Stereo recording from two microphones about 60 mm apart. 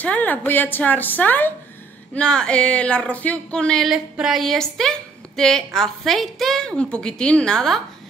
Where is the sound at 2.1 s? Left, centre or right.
Centre.